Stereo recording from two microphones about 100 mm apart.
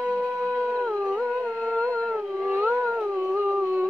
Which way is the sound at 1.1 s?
10° left (ahead or behind).